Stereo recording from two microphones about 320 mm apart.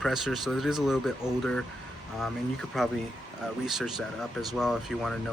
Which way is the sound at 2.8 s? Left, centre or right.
Centre.